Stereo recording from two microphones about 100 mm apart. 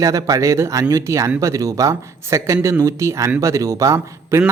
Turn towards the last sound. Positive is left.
turn(degrees=-30)  # may be behind; listen again after turning